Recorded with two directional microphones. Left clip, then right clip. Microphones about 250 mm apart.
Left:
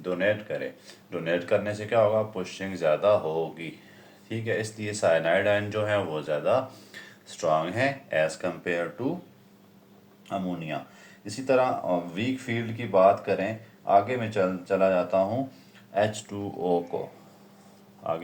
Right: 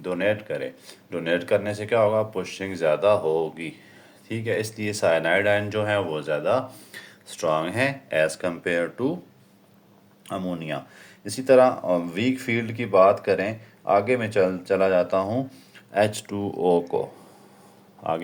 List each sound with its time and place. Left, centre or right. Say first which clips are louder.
0.0 s speech: right 2 dB; right
10.2 s speech: right 2 dB; right
18.0 s speech: right 4 dB; right